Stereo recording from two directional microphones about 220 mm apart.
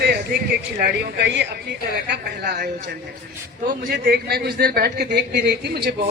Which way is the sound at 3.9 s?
45° right (ahead or behind).